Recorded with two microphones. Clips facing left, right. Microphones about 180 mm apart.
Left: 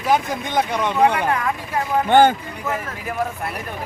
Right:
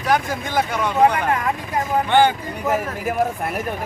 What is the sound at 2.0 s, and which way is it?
Speech, 45° left (ahead or behind).